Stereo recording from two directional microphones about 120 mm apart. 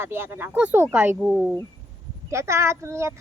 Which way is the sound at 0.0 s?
20° right (ahead or behind).